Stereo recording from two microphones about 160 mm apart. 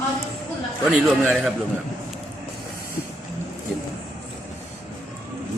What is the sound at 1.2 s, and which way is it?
Speech, 5° right (ahead or behind).